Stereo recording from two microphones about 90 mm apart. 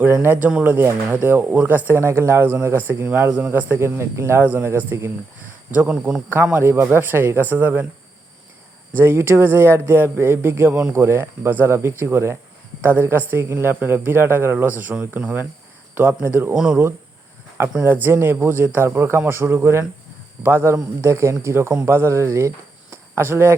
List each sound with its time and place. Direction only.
0.0 s speech: 25° right (ahead or behind)
5.7 s speech: 15° right (ahead or behind)
9.0 s speech: 25° right (ahead or behind)
16.6 s speech: 5° right (ahead or behind)
17.8 s speech: 25° right (ahead or behind)